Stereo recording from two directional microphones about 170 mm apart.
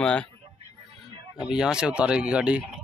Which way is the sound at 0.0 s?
5° left (ahead or behind).